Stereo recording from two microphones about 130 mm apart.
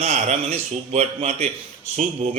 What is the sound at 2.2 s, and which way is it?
Speech, 65° right (ahead or behind).